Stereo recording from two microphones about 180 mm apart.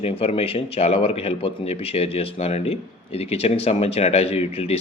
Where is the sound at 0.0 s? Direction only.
30° left (ahead or behind).